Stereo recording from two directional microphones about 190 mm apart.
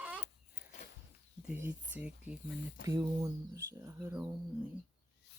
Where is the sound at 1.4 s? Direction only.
10° right (ahead or behind).